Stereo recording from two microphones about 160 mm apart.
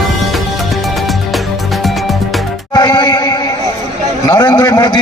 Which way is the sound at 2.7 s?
30° left (ahead or behind).